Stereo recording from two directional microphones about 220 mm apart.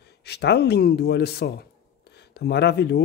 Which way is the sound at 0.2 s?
50° left (ahead or behind).